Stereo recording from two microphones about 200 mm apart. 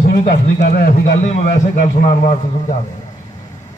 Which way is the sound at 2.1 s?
40° left (ahead or behind).